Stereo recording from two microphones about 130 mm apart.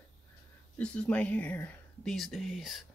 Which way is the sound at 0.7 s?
10° left (ahead or behind).